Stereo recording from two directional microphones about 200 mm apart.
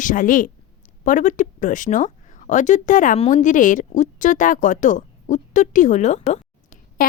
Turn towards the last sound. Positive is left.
turn(degrees=40)  # may be behind; listen again after turning